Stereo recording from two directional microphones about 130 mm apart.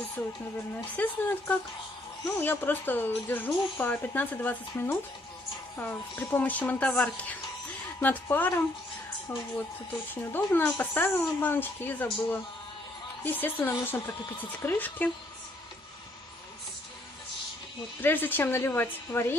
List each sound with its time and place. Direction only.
0.2 s a woman's voice: 15° left (ahead or behind)
10.3 s a woman's voice: 15° left (ahead or behind)
18.0 s a woman's voice: 15° left (ahead or behind)